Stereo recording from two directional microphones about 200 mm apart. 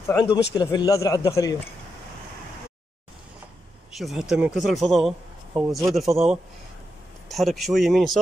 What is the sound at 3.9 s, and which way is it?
Speech, centre (ahead or behind).